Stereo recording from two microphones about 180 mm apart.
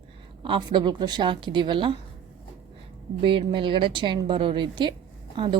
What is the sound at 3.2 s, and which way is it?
A woman's voice, 30° right (ahead or behind).